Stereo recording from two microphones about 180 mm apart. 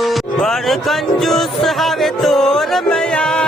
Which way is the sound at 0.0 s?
Centre (ahead or behind).